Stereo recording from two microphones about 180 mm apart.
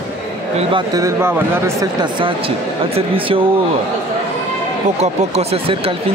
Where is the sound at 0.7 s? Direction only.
20° right (ahead or behind).